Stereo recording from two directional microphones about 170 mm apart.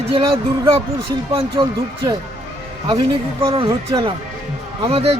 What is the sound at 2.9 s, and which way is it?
Speech, 30° right (ahead or behind).